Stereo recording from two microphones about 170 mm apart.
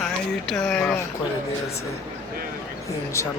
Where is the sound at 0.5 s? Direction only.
10° left (ahead or behind).